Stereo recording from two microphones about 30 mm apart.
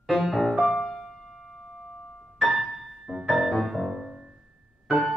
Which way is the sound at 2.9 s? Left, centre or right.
Centre.